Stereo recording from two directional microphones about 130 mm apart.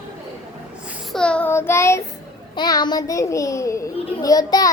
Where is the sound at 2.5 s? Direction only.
35° left (ahead or behind).